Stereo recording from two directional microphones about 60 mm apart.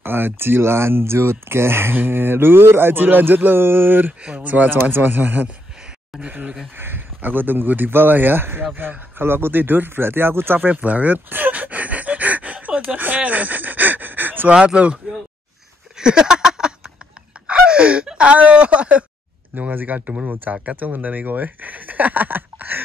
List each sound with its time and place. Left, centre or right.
0.0 s speech: right
4.2 s speech: right
8.7 s a sound: right
14.5 s speech: centre
16.0 s a sound: centre
17.5 s speech: centre
19.5 s speech: right